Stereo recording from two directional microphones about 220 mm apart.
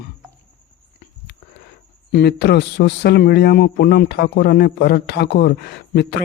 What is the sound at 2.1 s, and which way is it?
A man's voice, 50° left (ahead or behind).